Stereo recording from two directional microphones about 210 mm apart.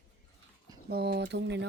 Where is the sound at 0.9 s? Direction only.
50° right (ahead or behind).